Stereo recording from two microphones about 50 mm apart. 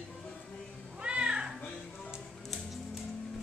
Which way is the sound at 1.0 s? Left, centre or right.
Centre.